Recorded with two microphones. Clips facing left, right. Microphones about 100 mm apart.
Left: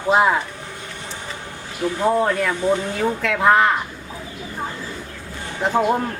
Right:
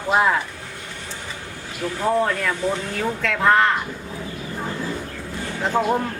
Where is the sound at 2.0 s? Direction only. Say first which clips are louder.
Left 2 dB; 15° left (ahead or behind).